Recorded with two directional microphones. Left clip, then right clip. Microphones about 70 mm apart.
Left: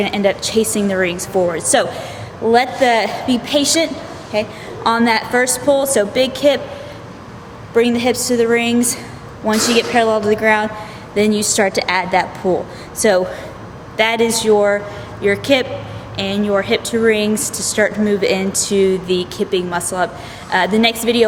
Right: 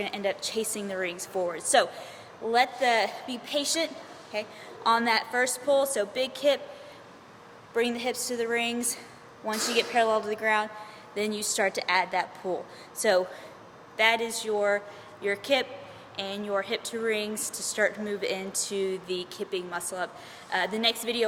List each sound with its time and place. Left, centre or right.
0.0 s a woman's voice: right
7.8 s a woman's voice: right